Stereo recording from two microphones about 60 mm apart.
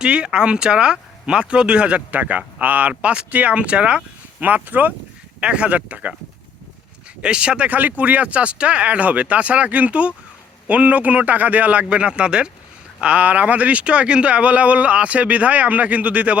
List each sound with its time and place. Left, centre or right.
0.0 s speech: centre
4.4 s speech: right
7.2 s speech: centre